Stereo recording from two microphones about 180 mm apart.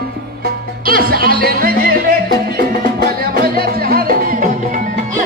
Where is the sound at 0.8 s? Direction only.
55° right (ahead or behind).